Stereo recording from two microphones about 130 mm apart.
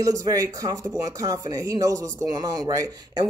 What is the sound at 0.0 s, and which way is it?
Speech, 25° right (ahead or behind).